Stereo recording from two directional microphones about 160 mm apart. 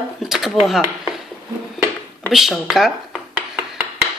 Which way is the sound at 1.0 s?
Centre (ahead or behind).